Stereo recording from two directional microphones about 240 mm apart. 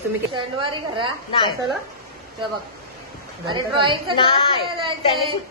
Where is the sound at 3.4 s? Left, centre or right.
Centre.